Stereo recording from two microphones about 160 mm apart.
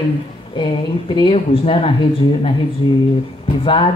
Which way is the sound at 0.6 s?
30° left (ahead or behind).